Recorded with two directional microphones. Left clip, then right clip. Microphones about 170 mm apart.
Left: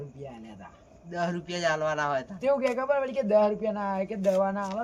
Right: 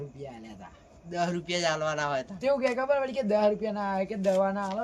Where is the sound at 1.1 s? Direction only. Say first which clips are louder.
Right 2 dB; 5° right (ahead or behind).